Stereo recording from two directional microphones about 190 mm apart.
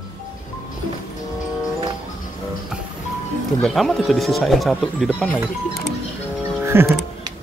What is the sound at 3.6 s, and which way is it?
Speech, centre (ahead or behind).